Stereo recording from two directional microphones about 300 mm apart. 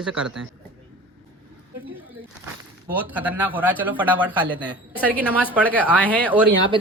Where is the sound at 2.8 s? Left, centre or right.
Centre.